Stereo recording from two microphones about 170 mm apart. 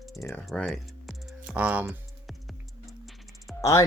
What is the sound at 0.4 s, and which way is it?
Speech, centre (ahead or behind).